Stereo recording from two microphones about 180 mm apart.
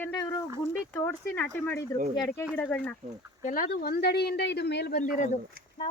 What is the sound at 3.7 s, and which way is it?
Speech, 60° left (ahead or behind).